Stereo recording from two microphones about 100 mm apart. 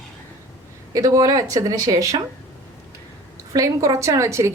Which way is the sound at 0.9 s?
35° right (ahead or behind).